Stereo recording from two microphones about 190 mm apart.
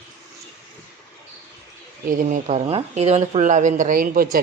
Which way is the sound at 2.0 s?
45° right (ahead or behind).